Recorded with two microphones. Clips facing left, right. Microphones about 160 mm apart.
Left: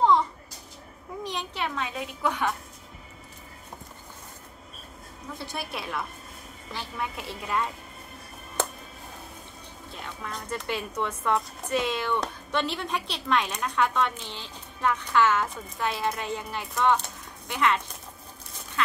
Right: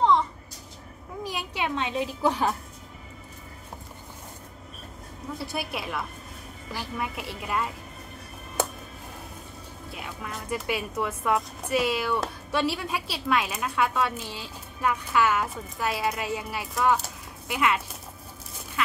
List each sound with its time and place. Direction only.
1.2 s a sound: 5° right (ahead or behind)
1.9 s a woman's voice: 30° right (ahead or behind)
5.4 s a woman's voice: 5° right (ahead or behind)
9.8 s speech: 10° right (ahead or behind)